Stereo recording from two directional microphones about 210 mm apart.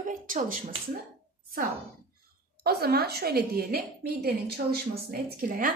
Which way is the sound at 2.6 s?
50° right (ahead or behind).